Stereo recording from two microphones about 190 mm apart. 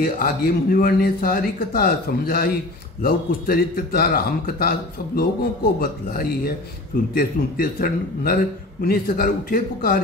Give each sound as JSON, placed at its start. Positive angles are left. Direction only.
{"t": 0.0, "sound": "speech", "side_deg": 50}